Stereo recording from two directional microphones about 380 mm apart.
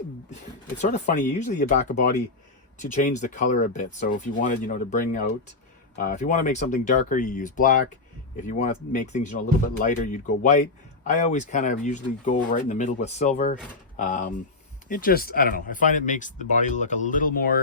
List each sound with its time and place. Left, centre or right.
0.8 s speech: centre